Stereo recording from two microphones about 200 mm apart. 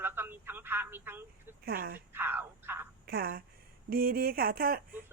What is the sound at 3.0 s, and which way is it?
Speech, 50° right (ahead or behind).